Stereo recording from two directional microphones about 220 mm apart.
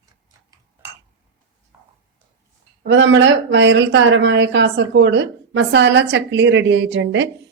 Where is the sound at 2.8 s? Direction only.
55° right (ahead or behind).